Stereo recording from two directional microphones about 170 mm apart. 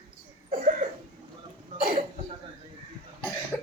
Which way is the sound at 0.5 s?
45° right (ahead or behind).